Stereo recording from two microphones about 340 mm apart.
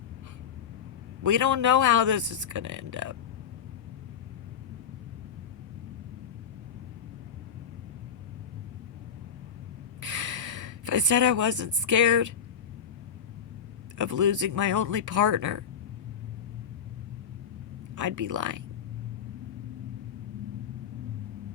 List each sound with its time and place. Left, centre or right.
1.2 s a man's voice: right
10.0 s a sound: right
14.0 s a man's voice: right
17.9 s a man's voice: right